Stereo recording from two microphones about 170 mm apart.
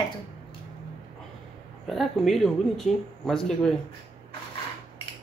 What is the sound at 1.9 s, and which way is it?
Speech, centre (ahead or behind).